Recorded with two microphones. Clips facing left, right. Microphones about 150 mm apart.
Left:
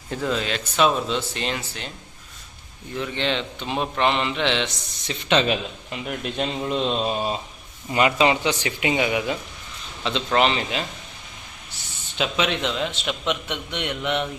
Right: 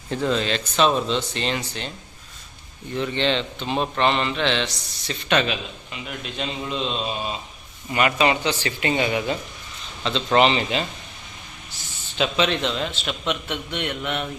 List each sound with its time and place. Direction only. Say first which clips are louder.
0.1 s a man's voice: right 2 dB; 10° left (ahead or behind)
2.9 s a man's voice: right 3 dB; 5° left (ahead or behind); by 5.5 s 20° left (ahead or behind)
5.5 s a man's voice: left 4 dB; 45° left (ahead or behind)
7.9 s a man's voice: left 1 dB; 20° left (ahead or behind)
10.2 s speech: right 3 dB; centre (ahead or behind)
12.1 s a man's voice: right 2 dB; 10° left (ahead or behind)